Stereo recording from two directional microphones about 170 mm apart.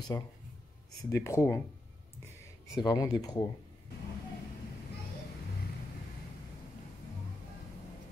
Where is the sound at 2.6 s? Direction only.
20° left (ahead or behind).